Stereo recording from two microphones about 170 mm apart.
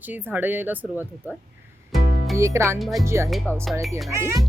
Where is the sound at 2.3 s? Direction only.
15° right (ahead or behind).